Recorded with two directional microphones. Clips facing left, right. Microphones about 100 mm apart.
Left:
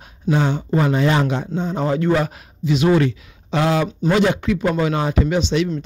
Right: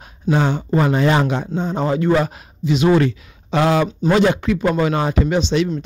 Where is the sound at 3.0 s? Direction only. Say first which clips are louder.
Right 1 dB; 45° right (ahead or behind).